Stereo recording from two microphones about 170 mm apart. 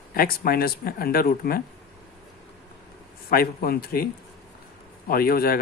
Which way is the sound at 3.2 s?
60° left (ahead or behind).